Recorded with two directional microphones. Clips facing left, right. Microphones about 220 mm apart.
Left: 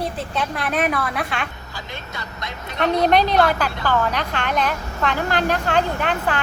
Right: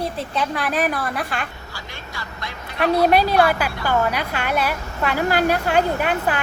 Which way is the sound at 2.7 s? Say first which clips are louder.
Right 1 dB; 5° right (ahead or behind).